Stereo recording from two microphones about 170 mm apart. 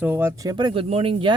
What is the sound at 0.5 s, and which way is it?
Speech, 30° right (ahead or behind).